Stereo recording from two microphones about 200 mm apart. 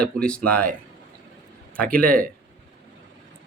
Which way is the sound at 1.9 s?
5° left (ahead or behind).